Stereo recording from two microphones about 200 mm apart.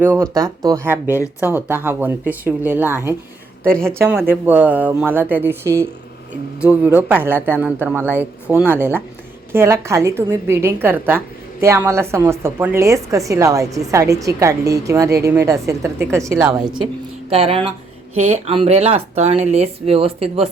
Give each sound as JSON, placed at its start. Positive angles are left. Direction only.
{"t": 0.0, "sound": "a woman's voice", "side_deg": -10}
{"t": 17.2, "sound": "speech", "side_deg": -30}